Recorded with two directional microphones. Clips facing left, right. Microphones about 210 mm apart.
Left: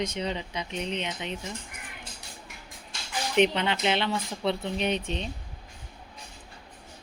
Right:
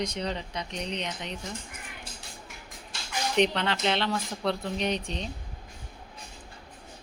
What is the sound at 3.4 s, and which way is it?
Speech, 5° left (ahead or behind).